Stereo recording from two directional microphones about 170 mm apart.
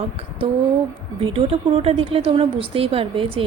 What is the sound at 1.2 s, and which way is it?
A woman's voice, 35° right (ahead or behind).